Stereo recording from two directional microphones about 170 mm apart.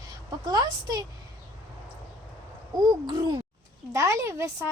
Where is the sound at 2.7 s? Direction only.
25° right (ahead or behind).